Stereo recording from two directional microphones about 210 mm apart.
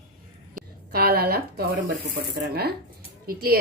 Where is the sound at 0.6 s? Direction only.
45° right (ahead or behind).